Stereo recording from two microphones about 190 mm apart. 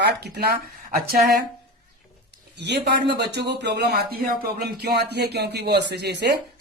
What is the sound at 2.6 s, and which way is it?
Speech, 60° right (ahead or behind).